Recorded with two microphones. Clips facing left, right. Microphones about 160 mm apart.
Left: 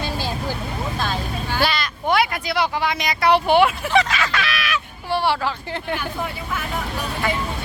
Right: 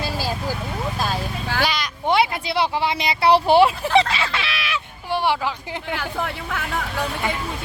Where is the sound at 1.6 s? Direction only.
15° right (ahead or behind).